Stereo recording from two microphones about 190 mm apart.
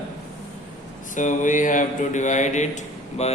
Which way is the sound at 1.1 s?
40° left (ahead or behind).